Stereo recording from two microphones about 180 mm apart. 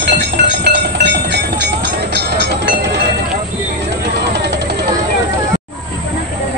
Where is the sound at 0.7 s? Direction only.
70° right (ahead or behind).